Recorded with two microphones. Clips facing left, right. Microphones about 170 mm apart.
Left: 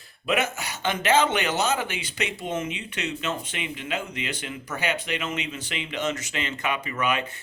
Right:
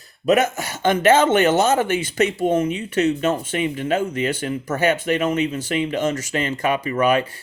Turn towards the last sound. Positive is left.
turn(degrees=-40)  # may be behind; listen again after turning